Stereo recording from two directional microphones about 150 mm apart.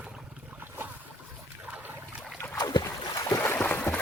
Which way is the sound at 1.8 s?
10° right (ahead or behind).